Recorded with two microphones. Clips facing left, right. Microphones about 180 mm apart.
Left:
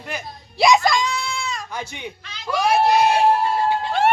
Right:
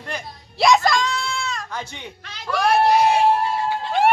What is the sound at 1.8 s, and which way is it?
Speech, 10° left (ahead or behind).